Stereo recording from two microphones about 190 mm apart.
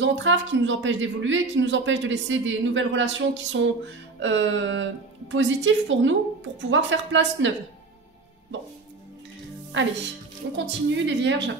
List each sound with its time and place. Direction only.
0.0 s a woman's voice: 75° right (ahead or behind)
9.7 s speech: 80° right
10.5 s a woman's voice: 70° right (ahead or behind)